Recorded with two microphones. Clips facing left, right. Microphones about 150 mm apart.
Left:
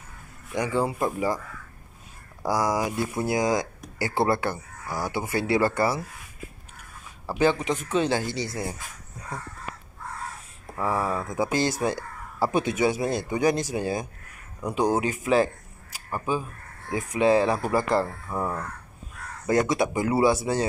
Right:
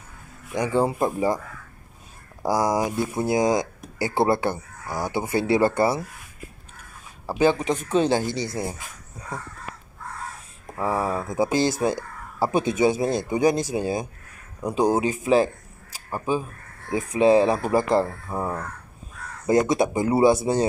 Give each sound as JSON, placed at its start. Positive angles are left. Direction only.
{"t": 0.5, "sound": "speech", "side_deg": -20}
{"t": 2.4, "sound": "speech", "side_deg": -15}
{"t": 7.2, "sound": "speech", "side_deg": -15}
{"t": 10.7, "sound": "speech", "side_deg": -15}
{"t": 11.8, "sound": "speech", "side_deg": -15}
{"t": 14.6, "sound": "speech", "side_deg": -30}
{"t": 16.9, "sound": "speech", "side_deg": -30}